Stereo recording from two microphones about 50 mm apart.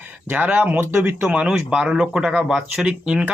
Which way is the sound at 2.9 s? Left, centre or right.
Right.